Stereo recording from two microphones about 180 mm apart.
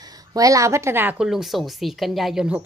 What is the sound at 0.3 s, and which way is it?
Speech, 20° right (ahead or behind).